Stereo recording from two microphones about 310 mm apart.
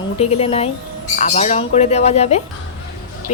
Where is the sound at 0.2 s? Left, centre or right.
Centre.